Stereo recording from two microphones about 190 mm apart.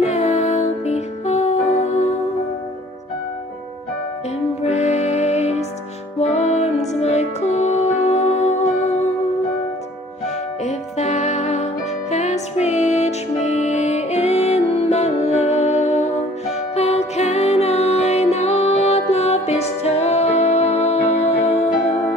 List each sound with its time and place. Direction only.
0.0 s music: 35° left (ahead or behind)
4.6 s music: 35° left (ahead or behind)
10.2 s music: 35° left (ahead or behind)